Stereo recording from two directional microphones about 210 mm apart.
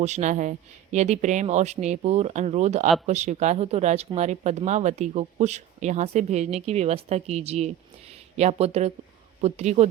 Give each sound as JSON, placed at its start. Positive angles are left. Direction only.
{"t": 0.0, "sound": "speech", "side_deg": -35}